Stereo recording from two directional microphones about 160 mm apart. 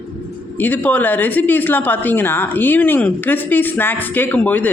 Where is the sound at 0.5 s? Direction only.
10° left (ahead or behind).